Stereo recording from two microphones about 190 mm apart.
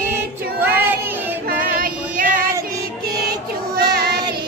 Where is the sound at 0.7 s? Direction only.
10° right (ahead or behind).